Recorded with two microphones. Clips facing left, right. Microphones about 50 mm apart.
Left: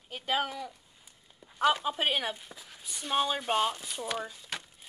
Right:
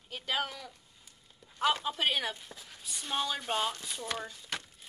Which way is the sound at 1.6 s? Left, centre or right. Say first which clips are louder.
Left 3 dB; centre.